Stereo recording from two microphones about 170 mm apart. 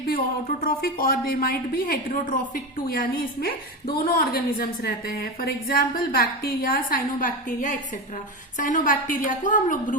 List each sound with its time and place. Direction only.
0.1 s a woman's voice: 55° left (ahead or behind)